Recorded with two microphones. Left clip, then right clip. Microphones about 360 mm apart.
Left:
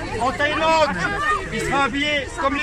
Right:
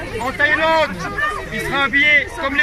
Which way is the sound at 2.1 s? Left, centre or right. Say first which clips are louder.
Right 6 dB; centre.